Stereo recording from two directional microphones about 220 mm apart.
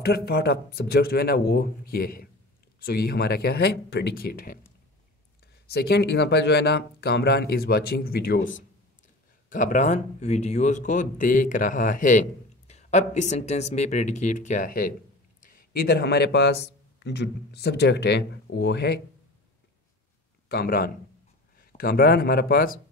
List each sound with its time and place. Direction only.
0.0 s speech: 45° left (ahead or behind)
5.7 s speech: 45° left (ahead or behind)
20.4 s speech: 45° left (ahead or behind)